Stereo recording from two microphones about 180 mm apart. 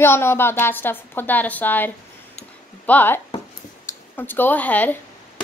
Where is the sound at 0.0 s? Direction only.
15° left (ahead or behind).